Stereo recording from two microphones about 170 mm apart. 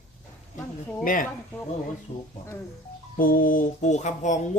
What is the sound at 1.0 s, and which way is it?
Speech, 55° left (ahead or behind).